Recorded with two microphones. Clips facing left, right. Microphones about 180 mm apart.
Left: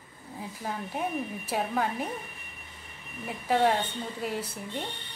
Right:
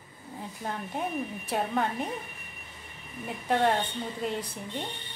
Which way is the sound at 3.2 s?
Centre (ahead or behind).